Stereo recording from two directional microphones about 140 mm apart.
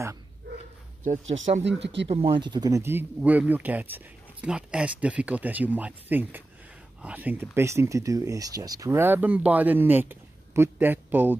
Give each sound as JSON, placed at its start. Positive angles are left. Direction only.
{"t": 1.0, "sound": "speech", "side_deg": -60}
{"t": 2.0, "sound": "speech", "side_deg": -40}